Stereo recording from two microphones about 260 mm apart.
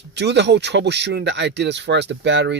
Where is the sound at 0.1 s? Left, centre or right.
Right.